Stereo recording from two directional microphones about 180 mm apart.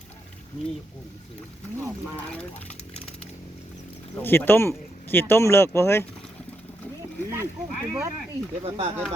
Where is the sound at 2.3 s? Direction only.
10° left (ahead or behind).